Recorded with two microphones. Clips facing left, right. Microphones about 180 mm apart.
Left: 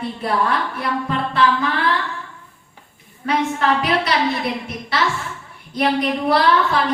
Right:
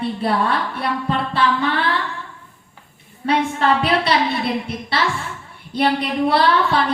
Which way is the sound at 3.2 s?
30° right (ahead or behind).